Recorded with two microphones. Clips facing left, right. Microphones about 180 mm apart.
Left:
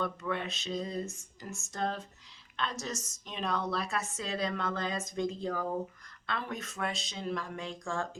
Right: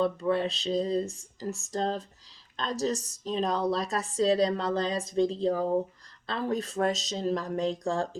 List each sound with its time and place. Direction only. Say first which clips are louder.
0.0 s a woman's voice: right 8 dB; 35° right (ahead or behind)